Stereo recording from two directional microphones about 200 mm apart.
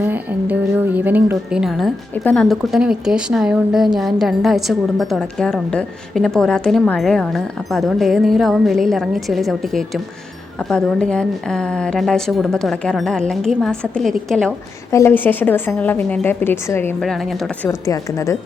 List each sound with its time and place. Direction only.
0.0 s music: 10° right (ahead or behind)
0.9 s a woman's voice: 10° right (ahead or behind)
17.7 s a woman's voice: 15° left (ahead or behind)